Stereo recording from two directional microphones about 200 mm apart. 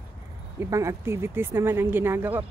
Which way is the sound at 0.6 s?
15° right (ahead or behind).